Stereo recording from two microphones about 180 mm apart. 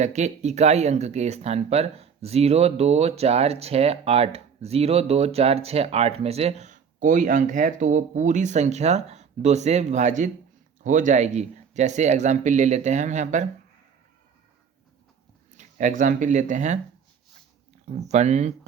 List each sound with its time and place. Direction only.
0.0 s speech: 40° right (ahead or behind)
15.5 s speech: 45° right (ahead or behind)
17.8 s speech: 40° right (ahead or behind)